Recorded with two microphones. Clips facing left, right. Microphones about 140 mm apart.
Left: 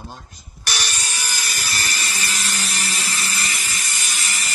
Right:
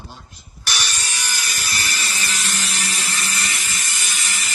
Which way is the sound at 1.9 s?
40° left (ahead or behind).